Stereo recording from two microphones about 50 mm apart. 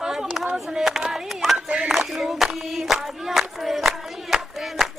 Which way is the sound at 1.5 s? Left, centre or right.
Right.